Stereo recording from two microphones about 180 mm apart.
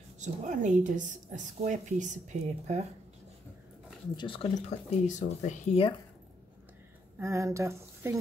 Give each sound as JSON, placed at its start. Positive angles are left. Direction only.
{"t": 0.2, "sound": "a woman's voice", "side_deg": -45}
{"t": 4.2, "sound": "speech", "side_deg": 30}
{"t": 7.2, "sound": "speech", "side_deg": -15}